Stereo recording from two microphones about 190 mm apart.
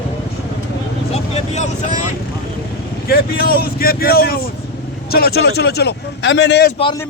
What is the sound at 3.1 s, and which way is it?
A man's voice, 50° left (ahead or behind).